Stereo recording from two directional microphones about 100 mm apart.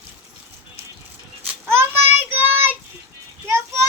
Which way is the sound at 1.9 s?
20° right (ahead or behind).